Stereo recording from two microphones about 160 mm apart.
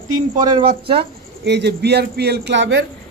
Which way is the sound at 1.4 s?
90° right.